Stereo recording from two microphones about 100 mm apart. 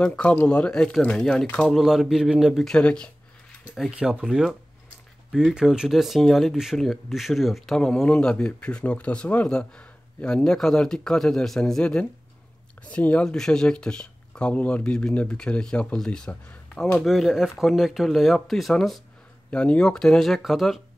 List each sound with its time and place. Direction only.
0.0 s speech: 10° left (ahead or behind)
3.7 s speech: 5° right (ahead or behind)
17.0 s speech: centre (ahead or behind)